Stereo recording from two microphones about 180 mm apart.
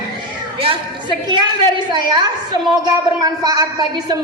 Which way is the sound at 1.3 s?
25° right (ahead or behind).